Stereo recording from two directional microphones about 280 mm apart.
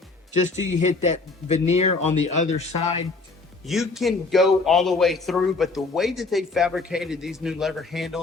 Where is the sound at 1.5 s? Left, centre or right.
Left.